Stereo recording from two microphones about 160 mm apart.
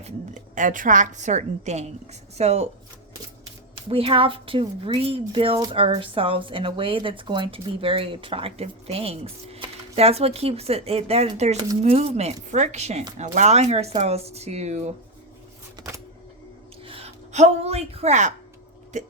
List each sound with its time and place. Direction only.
0.5 s a woman's voice: 55° right (ahead or behind)
3.8 s a woman's voice: 35° right (ahead or behind)
16.8 s a woman's voice: 35° right (ahead or behind)